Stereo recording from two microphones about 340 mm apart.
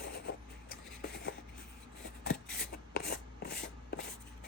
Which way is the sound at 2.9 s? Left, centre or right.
Left.